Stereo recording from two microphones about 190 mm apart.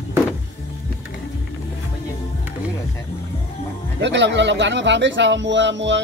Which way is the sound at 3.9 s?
70° right (ahead or behind).